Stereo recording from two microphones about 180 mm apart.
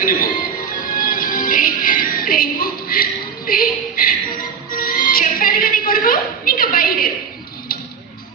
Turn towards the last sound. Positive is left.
turn(degrees=55)  # may be behind; listen again after turning